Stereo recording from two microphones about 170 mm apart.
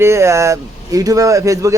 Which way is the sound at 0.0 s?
15° right (ahead or behind).